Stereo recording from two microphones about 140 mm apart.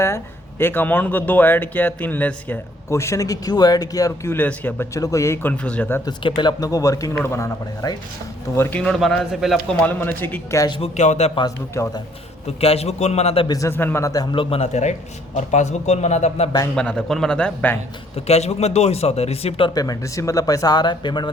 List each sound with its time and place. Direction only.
0.6 s a man's voice: 15° left (ahead or behind)
4.9 s a man's voice: 25° left (ahead or behind)
6.1 s a man's voice: 30° left (ahead or behind)
8.8 s speech: 5° left (ahead or behind)
9.8 s a man's voice: 15° left (ahead or behind)
10.8 s speech: 50° left (ahead or behind)
11.7 s speech: 20° left (ahead or behind)
12.5 s speech: 45° left (ahead or behind)
13.5 s speech: 20° left (ahead or behind)
14.3 s speech: 45° left (ahead or behind)
16.7 s speech: 5° left (ahead or behind)
18.3 s speech: 50° left (ahead or behind)
19.7 s speech: 25° left (ahead or behind)